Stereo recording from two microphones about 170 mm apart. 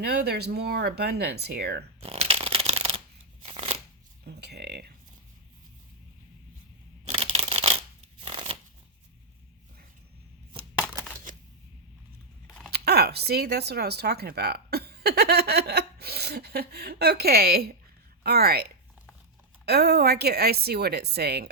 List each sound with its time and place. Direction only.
0.0 s a woman's voice: 75° right (ahead or behind)
2.0 s shuffling cards: 35° right (ahead or behind)
4.3 s a woman's voice: 75° right (ahead or behind)
7.1 s a sound: 35° right (ahead or behind)
8.2 s shuffling cards: 30° right (ahead or behind)
11.3 s a sound: 50° right (ahead or behind)
12.7 s a woman's voice: 70° right (ahead or behind)